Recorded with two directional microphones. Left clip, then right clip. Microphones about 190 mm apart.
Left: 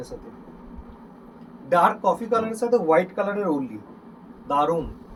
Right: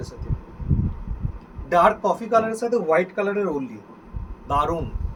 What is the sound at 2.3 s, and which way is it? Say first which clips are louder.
Speech: right 1 dB; 15° right (ahead or behind).